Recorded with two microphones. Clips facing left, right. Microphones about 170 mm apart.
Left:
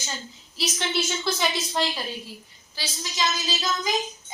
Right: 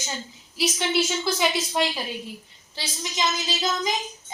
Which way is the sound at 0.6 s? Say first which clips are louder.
Right 4 dB; 10° right (ahead or behind).